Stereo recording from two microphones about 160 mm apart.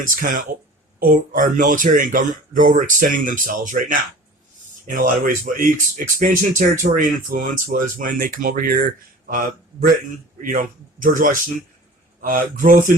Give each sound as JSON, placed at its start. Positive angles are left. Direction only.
{"t": 0.0, "sound": "speech", "side_deg": -55}
{"t": 10.4, "sound": "speech", "side_deg": -60}